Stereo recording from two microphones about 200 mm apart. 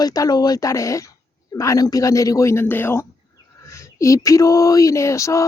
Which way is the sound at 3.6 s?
15° left (ahead or behind).